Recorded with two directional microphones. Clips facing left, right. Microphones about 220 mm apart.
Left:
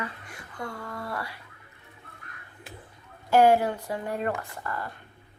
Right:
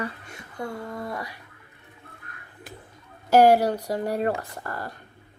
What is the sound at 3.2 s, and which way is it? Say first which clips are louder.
Speech: right 3 dB; 40° right (ahead or behind).